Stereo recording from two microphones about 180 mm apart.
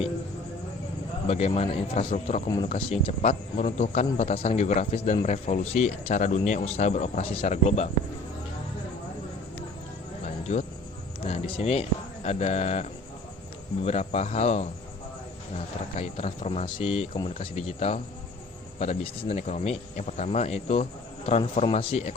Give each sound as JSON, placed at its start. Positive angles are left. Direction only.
{"t": 1.3, "sound": "speech", "side_deg": 35}
{"t": 10.2, "sound": "music", "side_deg": 40}
{"t": 11.2, "sound": "speech", "side_deg": 30}